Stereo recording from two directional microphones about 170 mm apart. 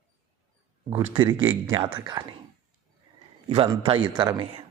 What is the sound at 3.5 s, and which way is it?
A man's voice, 30° right (ahead or behind).